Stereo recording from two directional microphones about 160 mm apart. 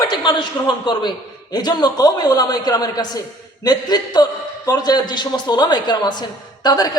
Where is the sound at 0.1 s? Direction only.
30° left (ahead or behind).